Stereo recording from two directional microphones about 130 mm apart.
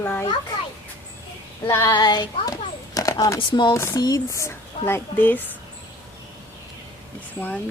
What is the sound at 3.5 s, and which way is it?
Speech, 35° left (ahead or behind).